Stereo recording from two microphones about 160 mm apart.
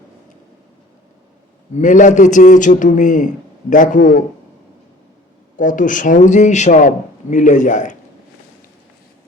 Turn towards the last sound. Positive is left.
turn(degrees=55)  # may be behind; listen again after turning